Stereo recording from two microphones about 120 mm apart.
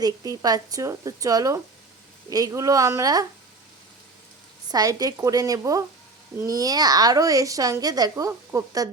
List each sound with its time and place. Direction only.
0.0 s a child's voice: 35° right (ahead or behind)
4.7 s a child's voice: 30° right (ahead or behind)